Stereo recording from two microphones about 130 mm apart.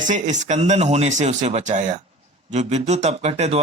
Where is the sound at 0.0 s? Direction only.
70° right (ahead or behind).